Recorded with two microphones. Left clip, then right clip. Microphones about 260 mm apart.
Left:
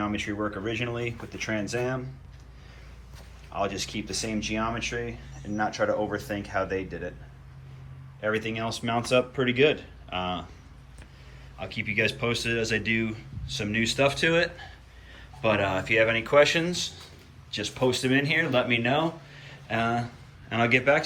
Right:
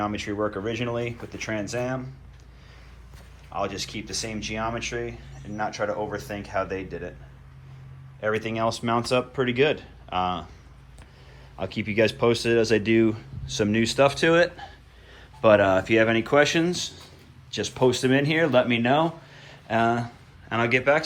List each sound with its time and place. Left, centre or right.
0.0 s speech: centre
3.5 s speech: centre
8.2 s speech: centre
11.6 s speech: centre
16.0 s speech: right
16.4 s speech: centre